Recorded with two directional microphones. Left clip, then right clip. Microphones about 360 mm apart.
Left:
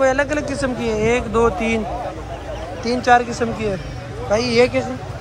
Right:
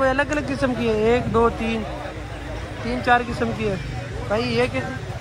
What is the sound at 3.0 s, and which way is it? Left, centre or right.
Speech, centre.